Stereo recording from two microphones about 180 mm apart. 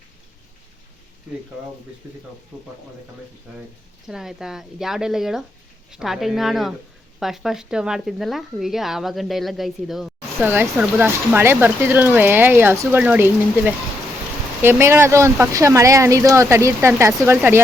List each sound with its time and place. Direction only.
2.5 s speech: 10° right (ahead or behind)
4.1 s speech: 5° right (ahead or behind)
10.5 s speech: 10° right (ahead or behind)